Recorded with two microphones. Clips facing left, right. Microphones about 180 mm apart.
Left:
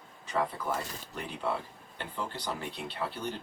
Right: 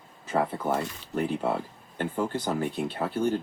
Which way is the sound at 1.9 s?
45° right (ahead or behind).